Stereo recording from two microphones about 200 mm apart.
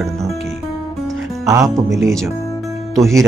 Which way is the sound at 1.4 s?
15° right (ahead or behind).